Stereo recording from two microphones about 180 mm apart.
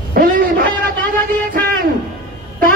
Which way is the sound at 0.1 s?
55° right (ahead or behind).